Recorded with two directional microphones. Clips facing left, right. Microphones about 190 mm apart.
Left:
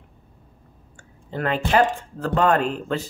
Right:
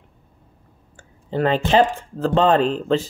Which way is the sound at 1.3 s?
25° right (ahead or behind).